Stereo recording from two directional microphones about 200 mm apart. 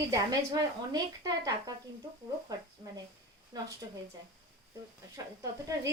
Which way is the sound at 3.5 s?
20° right (ahead or behind).